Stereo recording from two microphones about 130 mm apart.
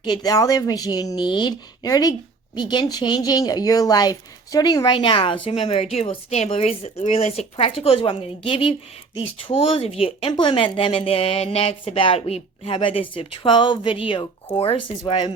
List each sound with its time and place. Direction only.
0.0 s a woman's voice: 35° left (ahead or behind)